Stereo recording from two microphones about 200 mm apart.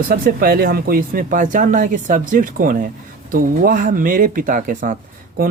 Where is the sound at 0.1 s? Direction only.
50° right (ahead or behind).